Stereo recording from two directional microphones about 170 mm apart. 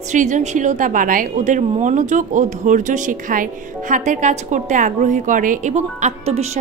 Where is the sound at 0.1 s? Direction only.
45° right (ahead or behind).